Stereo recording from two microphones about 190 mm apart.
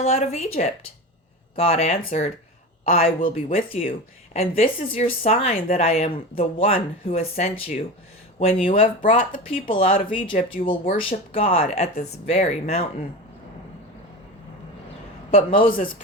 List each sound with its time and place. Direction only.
0.0 s speech: 35° left (ahead or behind)
15.3 s speech: 30° left (ahead or behind)